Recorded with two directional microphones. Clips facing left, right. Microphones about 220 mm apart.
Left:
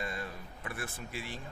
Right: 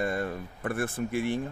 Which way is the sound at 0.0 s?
55° right (ahead or behind).